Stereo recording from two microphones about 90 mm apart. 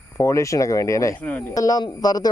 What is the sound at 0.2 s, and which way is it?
Speech, 35° left (ahead or behind).